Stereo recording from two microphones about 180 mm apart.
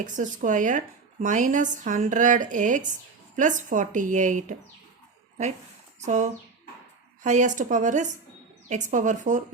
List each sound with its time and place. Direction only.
0.0 s a woman's voice: 45° right (ahead or behind)
6.0 s a woman's voice: 40° right (ahead or behind)